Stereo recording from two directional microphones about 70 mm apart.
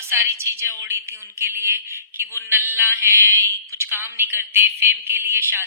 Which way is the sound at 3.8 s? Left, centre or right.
Right.